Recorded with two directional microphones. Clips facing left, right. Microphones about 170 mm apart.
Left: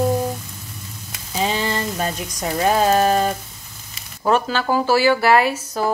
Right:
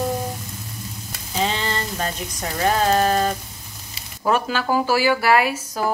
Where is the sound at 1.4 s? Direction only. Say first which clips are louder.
Left 3 dB; 10° left (ahead or behind).